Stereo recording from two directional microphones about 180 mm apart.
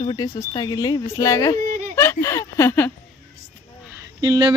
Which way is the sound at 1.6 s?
50° right (ahead or behind).